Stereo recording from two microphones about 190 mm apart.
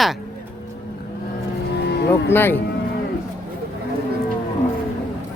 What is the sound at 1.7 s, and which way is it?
Music, 60° left (ahead or behind).